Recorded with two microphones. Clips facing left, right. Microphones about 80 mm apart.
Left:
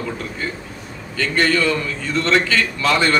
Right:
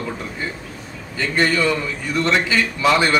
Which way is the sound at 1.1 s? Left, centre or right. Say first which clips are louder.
Left 1 dB; centre.